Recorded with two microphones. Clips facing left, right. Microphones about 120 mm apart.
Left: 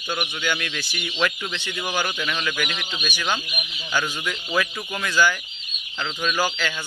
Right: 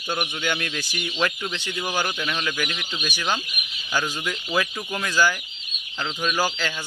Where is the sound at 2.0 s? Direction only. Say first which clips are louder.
Even; 15° right (ahead or behind).